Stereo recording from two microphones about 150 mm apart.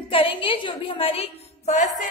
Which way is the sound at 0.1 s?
35° left (ahead or behind).